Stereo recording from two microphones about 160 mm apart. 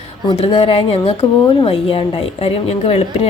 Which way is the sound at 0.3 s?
35° left (ahead or behind).